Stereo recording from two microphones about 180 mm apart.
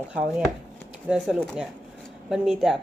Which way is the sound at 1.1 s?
5° right (ahead or behind).